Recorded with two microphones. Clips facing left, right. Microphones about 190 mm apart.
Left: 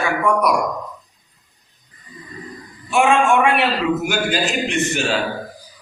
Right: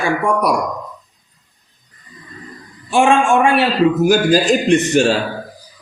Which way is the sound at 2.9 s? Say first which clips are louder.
Right 2 dB; 30° right (ahead or behind).